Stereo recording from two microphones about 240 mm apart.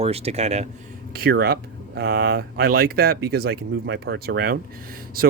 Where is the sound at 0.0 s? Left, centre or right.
Right.